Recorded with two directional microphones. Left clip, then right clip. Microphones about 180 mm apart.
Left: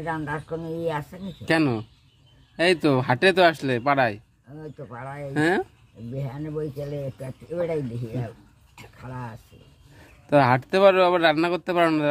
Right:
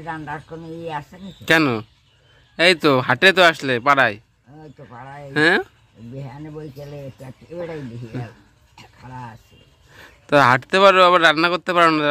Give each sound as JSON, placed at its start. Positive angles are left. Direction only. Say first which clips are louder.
{"t": 0.0, "sound": "speech", "louder": "even", "side_deg": 20}
{"t": 1.4, "sound": "a man's voice", "louder": "right 6 dB", "side_deg": -10}
{"t": 4.6, "sound": "speech", "louder": "left 2 dB", "side_deg": 20}
{"t": 5.3, "sound": "a man's voice", "louder": "right 7 dB", "side_deg": -5}
{"t": 6.2, "sound": "speech", "louder": "left 5 dB", "side_deg": 20}
{"t": 9.9, "sound": "a man's voice", "louder": "right 4 dB", "side_deg": -5}